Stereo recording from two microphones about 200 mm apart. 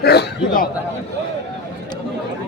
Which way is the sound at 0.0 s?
55° left (ahead or behind).